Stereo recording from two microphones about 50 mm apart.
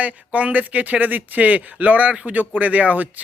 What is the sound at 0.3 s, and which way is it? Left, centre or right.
Speech, right.